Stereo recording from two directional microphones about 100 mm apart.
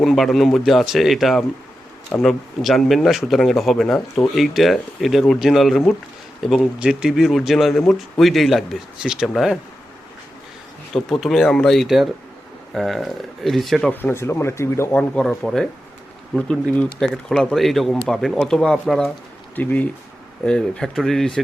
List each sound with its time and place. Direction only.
0.0 s speech: centre (ahead or behind)
10.9 s speech: centre (ahead or behind)
13.9 s speech: 20° left (ahead or behind)
14.9 s speech: 10° left (ahead or behind)
19.5 s speech: 15° left (ahead or behind)